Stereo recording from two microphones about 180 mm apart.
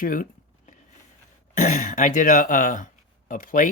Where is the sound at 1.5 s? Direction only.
45° left (ahead or behind).